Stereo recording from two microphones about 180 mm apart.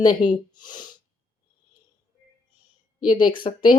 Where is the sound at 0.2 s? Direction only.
5° right (ahead or behind).